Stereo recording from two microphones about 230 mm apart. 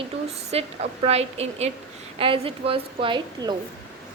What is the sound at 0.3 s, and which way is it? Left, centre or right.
Speech, right.